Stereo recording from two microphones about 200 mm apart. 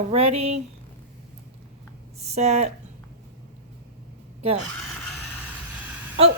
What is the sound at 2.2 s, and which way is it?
Speech, 35° right (ahead or behind).